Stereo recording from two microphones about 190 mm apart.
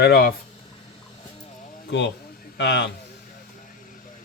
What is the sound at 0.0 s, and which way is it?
Speech, 55° left (ahead or behind).